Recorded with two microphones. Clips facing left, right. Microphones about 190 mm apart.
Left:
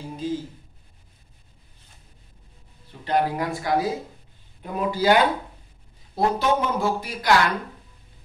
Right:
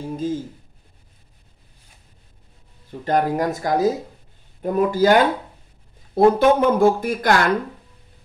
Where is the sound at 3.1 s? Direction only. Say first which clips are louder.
Right 4 dB; 45° right (ahead or behind).